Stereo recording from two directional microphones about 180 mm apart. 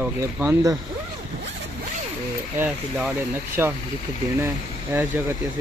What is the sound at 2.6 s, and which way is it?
Speech, 5° right (ahead or behind).